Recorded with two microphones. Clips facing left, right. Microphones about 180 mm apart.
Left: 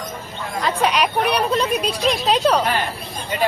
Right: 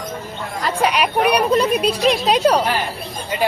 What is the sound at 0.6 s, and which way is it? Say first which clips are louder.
A woman's voice: right 1 dB; 10° right (ahead or behind).